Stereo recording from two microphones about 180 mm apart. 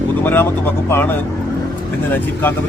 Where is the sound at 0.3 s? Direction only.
10° left (ahead or behind).